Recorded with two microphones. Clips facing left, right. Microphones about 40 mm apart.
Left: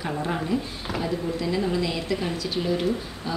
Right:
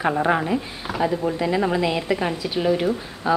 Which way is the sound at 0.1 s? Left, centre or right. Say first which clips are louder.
Right 6 dB; right.